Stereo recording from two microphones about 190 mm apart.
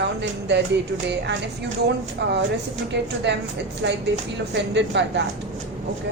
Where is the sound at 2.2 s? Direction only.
65° right (ahead or behind).